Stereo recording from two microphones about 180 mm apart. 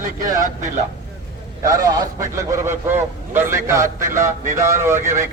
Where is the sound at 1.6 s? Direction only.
20° right (ahead or behind).